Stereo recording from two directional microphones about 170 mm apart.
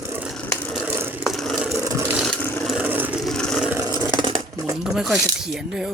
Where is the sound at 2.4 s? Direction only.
10° left (ahead or behind).